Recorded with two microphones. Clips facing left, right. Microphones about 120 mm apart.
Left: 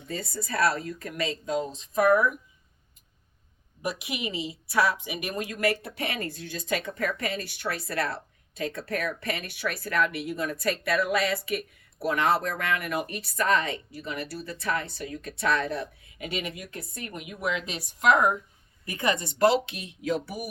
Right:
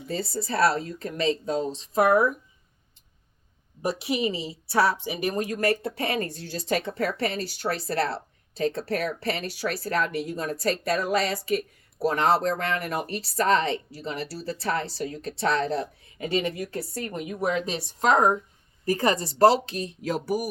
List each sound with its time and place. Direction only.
0.1 s speech: 30° right (ahead or behind)
3.8 s a woman's voice: 30° right (ahead or behind)